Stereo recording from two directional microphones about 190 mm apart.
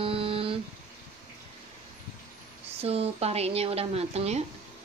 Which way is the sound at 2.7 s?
30° right (ahead or behind).